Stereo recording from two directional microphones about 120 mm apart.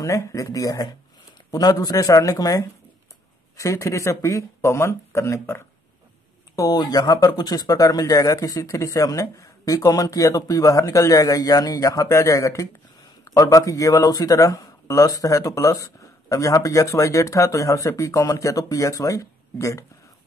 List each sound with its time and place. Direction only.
0.0 s speech: 25° left (ahead or behind)